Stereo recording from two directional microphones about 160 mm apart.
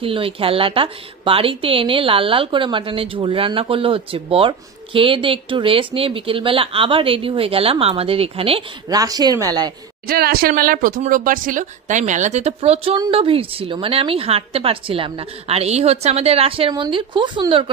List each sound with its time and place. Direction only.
0.0 s a woman's voice: 35° right (ahead or behind)
8.8 s speech: 20° right (ahead or behind)
10.0 s a woman's voice: 70° right (ahead or behind); by 17.6 s 30° right (ahead or behind)